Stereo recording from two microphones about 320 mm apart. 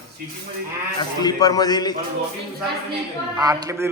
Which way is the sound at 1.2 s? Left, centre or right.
Centre.